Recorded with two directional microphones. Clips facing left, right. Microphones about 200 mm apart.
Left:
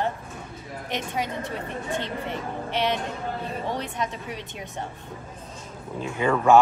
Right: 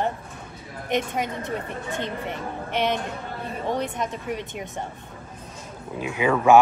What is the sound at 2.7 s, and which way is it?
Speech, 50° right (ahead or behind).